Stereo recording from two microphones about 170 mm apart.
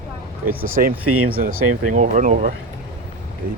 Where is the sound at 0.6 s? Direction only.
55° right (ahead or behind).